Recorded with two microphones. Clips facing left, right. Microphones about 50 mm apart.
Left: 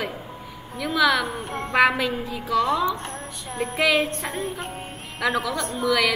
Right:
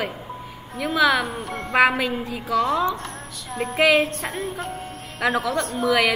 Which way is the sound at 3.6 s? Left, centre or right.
Centre.